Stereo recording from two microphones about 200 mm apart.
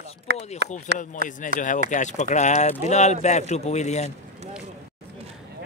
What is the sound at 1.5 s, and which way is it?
Speech, 40° left (ahead or behind).